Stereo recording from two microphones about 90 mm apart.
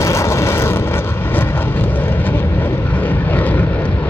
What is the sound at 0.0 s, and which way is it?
Vehicle, 35° left (ahead or behind).